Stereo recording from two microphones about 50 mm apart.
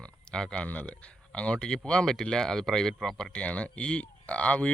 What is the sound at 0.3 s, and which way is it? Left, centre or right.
Speech, centre.